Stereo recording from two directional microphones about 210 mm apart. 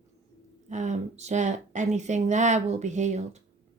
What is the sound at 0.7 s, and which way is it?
Speech, 35° right (ahead or behind).